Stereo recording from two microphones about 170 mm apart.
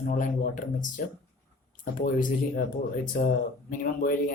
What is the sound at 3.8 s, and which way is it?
Speech, 55° left (ahead or behind).